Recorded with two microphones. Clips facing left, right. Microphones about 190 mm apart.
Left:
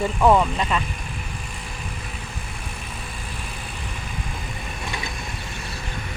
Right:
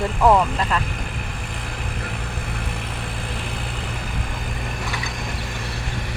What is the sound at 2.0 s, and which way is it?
Vehicle, 70° right (ahead or behind).